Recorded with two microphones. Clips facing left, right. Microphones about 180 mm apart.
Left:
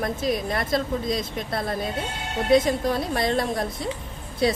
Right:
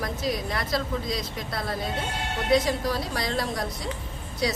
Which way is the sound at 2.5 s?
50° left (ahead or behind).